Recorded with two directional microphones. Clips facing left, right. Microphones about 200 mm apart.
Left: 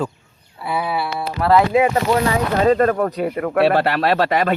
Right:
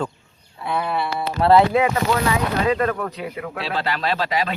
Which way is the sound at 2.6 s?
45° left (ahead or behind).